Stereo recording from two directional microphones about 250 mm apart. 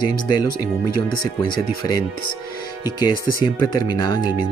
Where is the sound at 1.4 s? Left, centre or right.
Centre.